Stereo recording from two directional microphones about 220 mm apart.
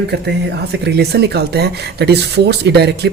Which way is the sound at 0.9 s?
50° right (ahead or behind).